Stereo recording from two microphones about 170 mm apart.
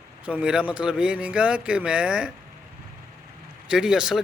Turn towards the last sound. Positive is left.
turn(degrees=-5)  # may be behind; listen again after turning